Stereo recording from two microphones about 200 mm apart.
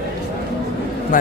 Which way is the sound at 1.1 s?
45° left (ahead or behind).